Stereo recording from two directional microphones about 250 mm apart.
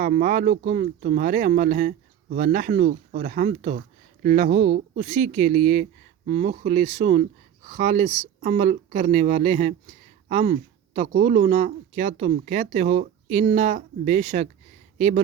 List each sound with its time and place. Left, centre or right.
0.0 s speech: right